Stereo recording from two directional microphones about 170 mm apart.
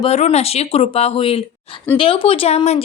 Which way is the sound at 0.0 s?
40° left (ahead or behind).